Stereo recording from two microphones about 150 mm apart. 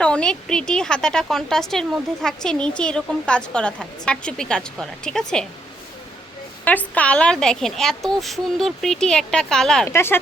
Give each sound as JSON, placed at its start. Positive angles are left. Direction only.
{"t": 0.0, "sound": "speech", "side_deg": 5}
{"t": 6.7, "sound": "speech", "side_deg": 10}
{"t": 9.9, "sound": "speech", "side_deg": 15}